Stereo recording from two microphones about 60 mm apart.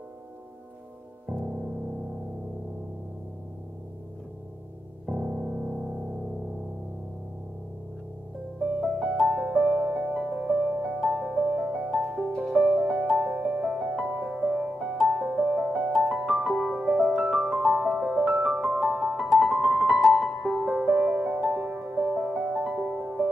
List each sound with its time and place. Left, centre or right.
5.0 s music: right
8.8 s music: centre
11.4 s music: centre
18.8 s music: centre